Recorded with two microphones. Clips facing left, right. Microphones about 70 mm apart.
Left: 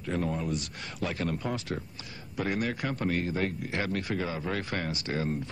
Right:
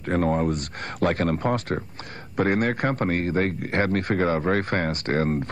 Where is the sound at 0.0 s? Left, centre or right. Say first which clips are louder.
Right 9 dB; right.